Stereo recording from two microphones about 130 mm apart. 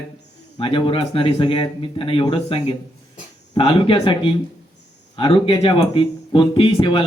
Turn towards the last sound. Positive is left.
turn(degrees=40)  # may be behind; listen again after turning